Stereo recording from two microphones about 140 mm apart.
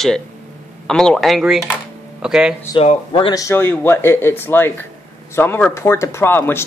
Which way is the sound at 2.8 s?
45° left (ahead or behind).